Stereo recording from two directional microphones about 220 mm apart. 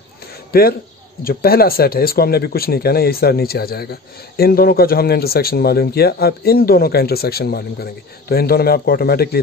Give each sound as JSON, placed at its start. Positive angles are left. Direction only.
{"t": 0.5, "sound": "speech", "side_deg": 45}